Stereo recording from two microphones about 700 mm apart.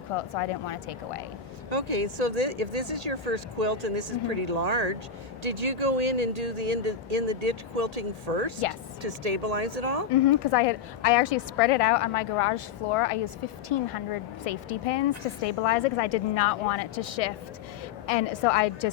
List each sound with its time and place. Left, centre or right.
0.2 s a woman's voice: left
1.7 s speech: right
10.1 s a woman's voice: left